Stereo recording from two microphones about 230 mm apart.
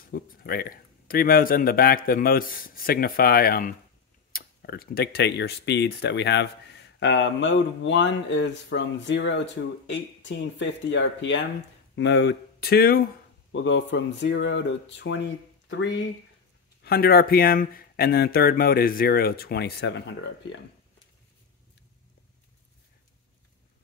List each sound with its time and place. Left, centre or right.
0.1 s speech: left
13.5 s speech: left